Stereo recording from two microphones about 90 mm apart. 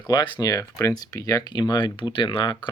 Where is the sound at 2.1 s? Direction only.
65° left (ahead or behind).